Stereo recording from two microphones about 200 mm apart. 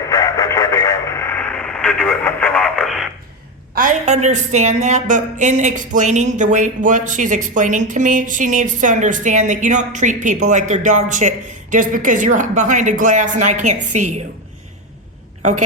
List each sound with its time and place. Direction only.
0.1 s radio: 20° left (ahead or behind); by 3.1 s centre (ahead or behind)
3.8 s a woman's voice: 40° right (ahead or behind)